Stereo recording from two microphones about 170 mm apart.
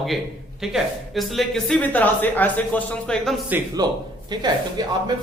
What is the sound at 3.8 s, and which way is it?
Speech, 25° right (ahead or behind).